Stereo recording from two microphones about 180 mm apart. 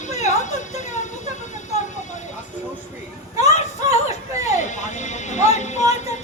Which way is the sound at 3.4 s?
20° right (ahead or behind).